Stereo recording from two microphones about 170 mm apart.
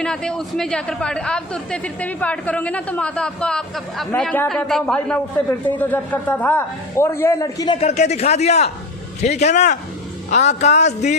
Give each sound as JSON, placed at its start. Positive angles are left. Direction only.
{"t": 0.0, "sound": "a man's voice", "side_deg": 5}
{"t": 7.8, "sound": "speech", "side_deg": 40}